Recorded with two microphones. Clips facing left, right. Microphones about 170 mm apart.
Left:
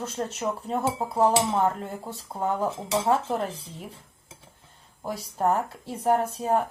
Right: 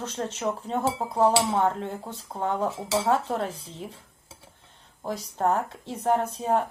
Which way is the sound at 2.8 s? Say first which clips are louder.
Even; 20° left (ahead or behind).